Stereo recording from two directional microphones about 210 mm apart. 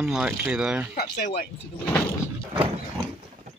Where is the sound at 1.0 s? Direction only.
45° left (ahead or behind).